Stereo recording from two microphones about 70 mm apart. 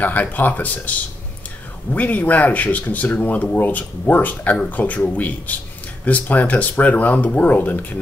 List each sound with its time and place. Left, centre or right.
0.0 s speech: left